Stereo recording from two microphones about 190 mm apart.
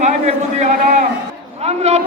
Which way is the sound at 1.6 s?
35° right (ahead or behind).